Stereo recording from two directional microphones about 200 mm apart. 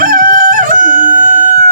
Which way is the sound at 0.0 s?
45° right (ahead or behind).